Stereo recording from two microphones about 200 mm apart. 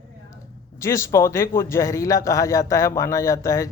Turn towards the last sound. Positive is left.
turn(degrees=15)  # may be behind; listen again after turning